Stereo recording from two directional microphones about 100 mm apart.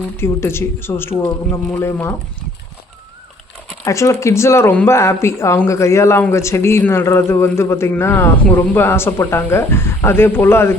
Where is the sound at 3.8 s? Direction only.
30° left (ahead or behind).